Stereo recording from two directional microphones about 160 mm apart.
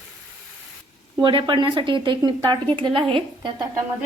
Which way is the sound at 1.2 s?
30° right (ahead or behind).